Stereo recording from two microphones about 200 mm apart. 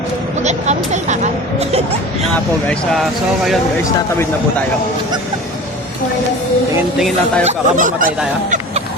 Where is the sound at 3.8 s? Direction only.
15° left (ahead or behind).